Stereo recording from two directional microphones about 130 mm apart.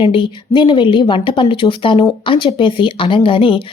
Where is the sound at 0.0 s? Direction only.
40° left (ahead or behind).